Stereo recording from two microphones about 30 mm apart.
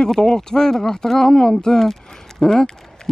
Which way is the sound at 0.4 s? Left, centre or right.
Centre.